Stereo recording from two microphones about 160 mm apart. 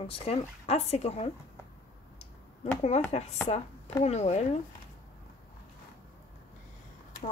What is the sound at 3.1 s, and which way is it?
Speech, 40° left (ahead or behind).